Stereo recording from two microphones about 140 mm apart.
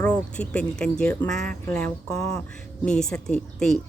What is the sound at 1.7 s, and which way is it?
Speech, 20° left (ahead or behind).